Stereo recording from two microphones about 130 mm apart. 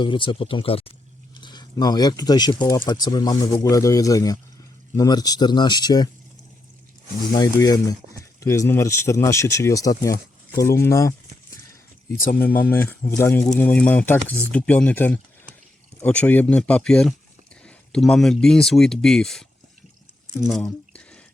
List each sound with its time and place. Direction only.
0.0 s a sound: 40° left (ahead or behind)
1.7 s speech: 30° left (ahead or behind)
7.3 s speech: 30° left (ahead or behind)
12.4 s speech: 10° left (ahead or behind)
20.9 s music: 10° left (ahead or behind)